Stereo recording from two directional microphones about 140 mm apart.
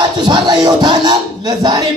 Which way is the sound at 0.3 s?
30° right (ahead or behind).